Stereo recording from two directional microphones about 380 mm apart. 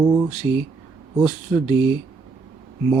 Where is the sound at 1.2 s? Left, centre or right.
Centre.